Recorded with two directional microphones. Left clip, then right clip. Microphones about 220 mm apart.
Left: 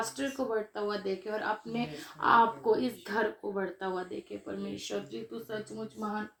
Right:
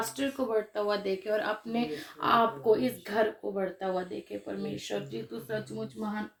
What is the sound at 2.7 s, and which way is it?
Speech, 15° right (ahead or behind).